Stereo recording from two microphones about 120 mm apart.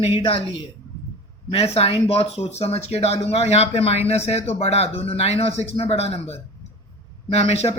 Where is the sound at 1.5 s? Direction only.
60° left (ahead or behind).